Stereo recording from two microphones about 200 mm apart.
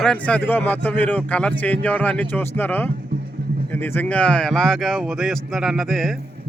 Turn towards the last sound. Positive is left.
turn(degrees=0)  # may be behind; listen again after turning